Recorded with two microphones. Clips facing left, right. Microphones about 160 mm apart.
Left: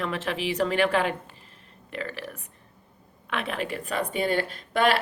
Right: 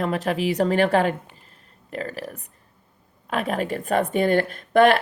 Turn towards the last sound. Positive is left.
turn(degrees=-50)  # may be behind; listen again after turning